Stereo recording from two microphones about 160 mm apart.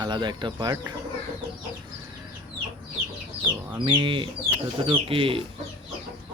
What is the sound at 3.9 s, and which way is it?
Speech, 30° right (ahead or behind).